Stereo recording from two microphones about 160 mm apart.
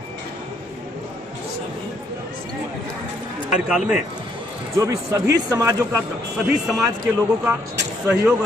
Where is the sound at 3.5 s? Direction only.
5° right (ahead or behind).